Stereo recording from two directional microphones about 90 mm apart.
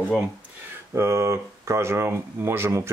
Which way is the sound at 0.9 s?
30° right (ahead or behind).